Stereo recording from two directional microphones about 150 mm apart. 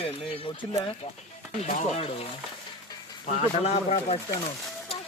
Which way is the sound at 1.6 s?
45° left (ahead or behind).